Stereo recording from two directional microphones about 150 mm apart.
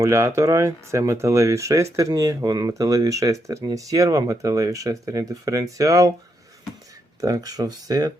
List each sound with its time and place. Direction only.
0.0 s speech: 20° right (ahead or behind)
7.2 s speech: 25° right (ahead or behind)